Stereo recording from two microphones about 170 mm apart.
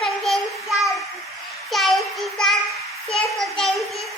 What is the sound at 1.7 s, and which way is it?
Child singing, centre (ahead or behind).